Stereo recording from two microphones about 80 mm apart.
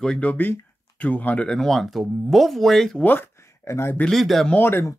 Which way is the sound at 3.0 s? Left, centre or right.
Left.